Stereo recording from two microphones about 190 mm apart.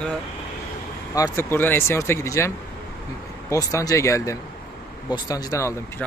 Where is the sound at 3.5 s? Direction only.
15° left (ahead or behind).